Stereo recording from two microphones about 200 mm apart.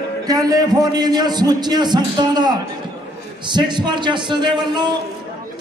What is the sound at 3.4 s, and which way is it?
A man's voice, 20° right (ahead or behind).